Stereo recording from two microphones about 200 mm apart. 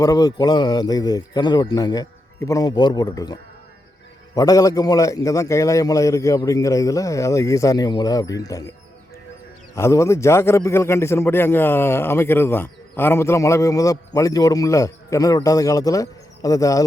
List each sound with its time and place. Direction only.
0.0 s speech: 20° left (ahead or behind)
4.4 s a man's voice: 15° left (ahead or behind)
9.7 s a man's voice: 15° left (ahead or behind)